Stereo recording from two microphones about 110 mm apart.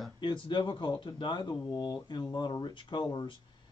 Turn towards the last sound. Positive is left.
turn(degrees=45)  # may be behind; listen again after turning